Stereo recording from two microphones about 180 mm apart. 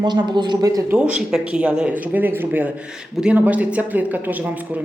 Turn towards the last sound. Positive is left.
turn(degrees=-10)  # may be behind; listen again after turning